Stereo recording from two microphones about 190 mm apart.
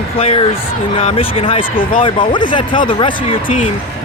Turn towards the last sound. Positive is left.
turn(degrees=25)  # may be behind; listen again after turning